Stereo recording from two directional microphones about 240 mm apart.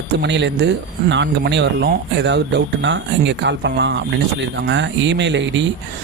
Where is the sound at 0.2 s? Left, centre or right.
Right.